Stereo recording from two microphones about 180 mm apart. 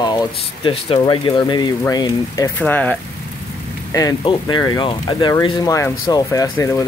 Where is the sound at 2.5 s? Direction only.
10° left (ahead or behind).